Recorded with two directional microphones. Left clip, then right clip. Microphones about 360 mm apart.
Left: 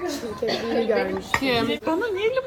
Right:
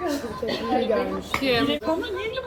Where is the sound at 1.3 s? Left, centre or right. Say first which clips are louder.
Right 1 dB; centre.